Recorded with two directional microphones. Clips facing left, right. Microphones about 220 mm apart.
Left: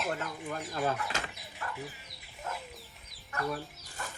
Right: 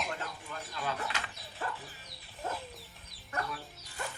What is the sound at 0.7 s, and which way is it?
Speech, 45° left (ahead or behind).